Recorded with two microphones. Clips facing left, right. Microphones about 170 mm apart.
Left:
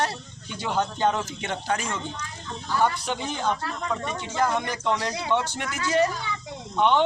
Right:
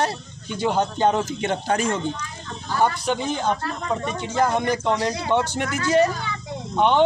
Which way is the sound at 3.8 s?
40° right (ahead or behind).